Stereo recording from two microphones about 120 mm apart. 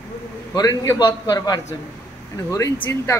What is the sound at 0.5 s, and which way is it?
A man's voice, 30° left (ahead or behind).